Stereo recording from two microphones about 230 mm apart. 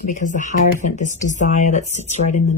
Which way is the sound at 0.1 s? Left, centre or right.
Left.